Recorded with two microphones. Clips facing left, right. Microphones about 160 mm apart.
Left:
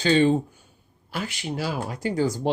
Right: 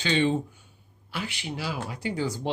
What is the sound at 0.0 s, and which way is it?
Speech, 40° left (ahead or behind).